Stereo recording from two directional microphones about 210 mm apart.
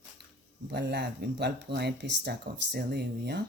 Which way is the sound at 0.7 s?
55° right (ahead or behind).